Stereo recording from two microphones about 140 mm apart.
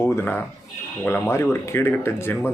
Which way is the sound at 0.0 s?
15° left (ahead or behind).